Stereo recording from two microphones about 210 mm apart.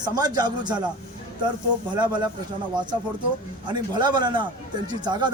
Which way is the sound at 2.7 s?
20° right (ahead or behind).